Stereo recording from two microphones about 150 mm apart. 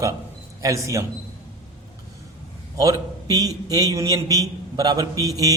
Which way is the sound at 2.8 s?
25° right (ahead or behind).